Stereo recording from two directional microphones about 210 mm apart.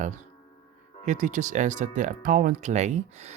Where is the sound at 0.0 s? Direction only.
35° right (ahead or behind).